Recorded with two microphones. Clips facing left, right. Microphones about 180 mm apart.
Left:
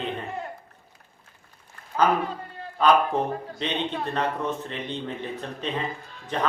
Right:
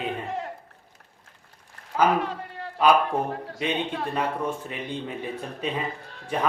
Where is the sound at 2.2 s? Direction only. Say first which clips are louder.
Right 1 dB; 90° right.